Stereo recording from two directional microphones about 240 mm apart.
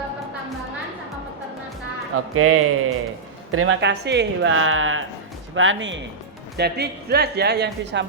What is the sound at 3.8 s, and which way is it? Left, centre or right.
A woman's voice, right.